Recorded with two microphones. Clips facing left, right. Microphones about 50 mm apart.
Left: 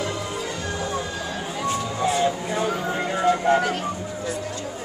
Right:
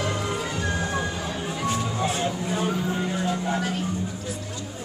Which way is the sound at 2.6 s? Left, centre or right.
Left.